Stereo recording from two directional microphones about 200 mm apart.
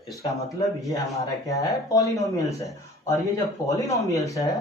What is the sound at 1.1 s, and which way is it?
Speech, 15° left (ahead or behind).